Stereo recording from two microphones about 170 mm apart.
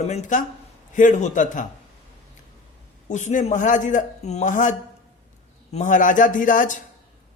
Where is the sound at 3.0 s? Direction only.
45° left (ahead or behind).